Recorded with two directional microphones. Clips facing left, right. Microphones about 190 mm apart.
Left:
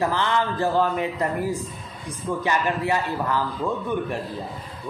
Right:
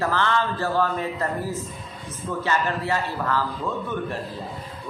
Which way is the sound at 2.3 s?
15° left (ahead or behind).